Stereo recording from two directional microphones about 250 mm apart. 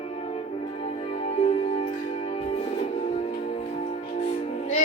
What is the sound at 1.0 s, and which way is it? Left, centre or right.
Music, left.